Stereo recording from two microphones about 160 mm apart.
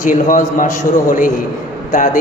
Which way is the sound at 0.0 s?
55° left (ahead or behind).